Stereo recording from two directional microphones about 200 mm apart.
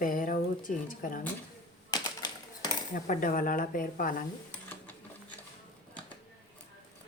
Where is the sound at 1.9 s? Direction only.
20° left (ahead or behind).